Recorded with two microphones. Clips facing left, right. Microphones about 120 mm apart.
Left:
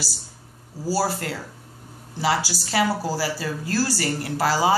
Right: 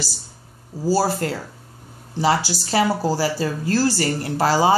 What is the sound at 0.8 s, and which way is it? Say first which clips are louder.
Speech: right 4 dB; 25° right (ahead or behind).